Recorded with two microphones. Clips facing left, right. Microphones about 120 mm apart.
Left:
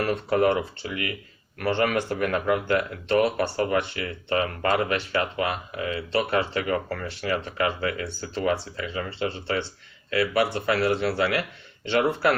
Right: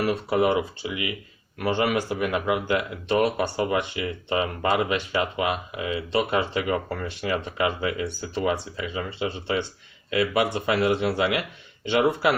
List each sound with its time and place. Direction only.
0.0 s speech: 10° right (ahead or behind)